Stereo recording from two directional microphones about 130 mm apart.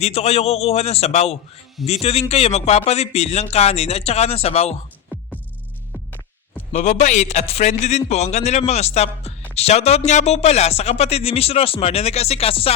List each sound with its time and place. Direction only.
0.0 s speech: 55° left (ahead or behind)
6.7 s a man's voice: 65° left (ahead or behind); by 12.7 s 50° left (ahead or behind)